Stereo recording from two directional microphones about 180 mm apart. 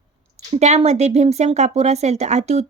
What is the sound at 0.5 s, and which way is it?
Speech, 35° right (ahead or behind).